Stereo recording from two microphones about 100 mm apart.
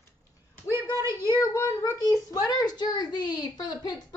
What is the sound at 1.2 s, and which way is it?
A child's voice, 35° left (ahead or behind).